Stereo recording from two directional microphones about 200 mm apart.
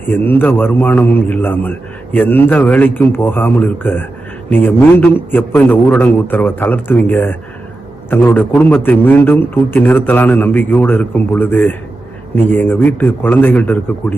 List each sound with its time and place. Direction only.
0.1 s a man's voice: 10° left (ahead or behind)